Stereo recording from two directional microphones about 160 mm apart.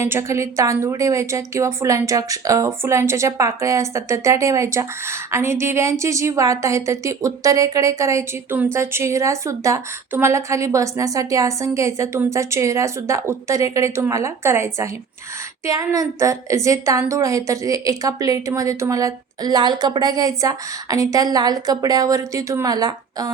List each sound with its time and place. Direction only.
0.0 s a woman's voice: 15° right (ahead or behind)